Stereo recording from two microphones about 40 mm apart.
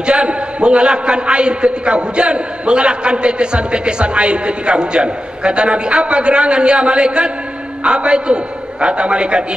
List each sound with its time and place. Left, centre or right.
0.0 s a man's voice: right